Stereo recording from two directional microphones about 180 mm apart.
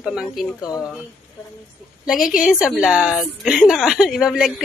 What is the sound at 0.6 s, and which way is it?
Speech, 20° left (ahead or behind).